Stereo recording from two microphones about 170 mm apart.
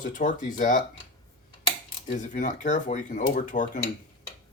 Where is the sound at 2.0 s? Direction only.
50° left (ahead or behind).